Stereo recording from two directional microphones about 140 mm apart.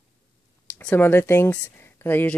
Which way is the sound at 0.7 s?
15° left (ahead or behind).